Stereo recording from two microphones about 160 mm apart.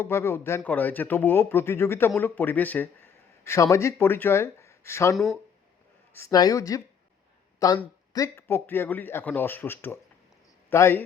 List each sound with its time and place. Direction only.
0.0 s speech: 15° left (ahead or behind)
5.1 s speech: centre (ahead or behind)
6.1 s speech: 20° left (ahead or behind)
8.1 s speech: 20° left (ahead or behind)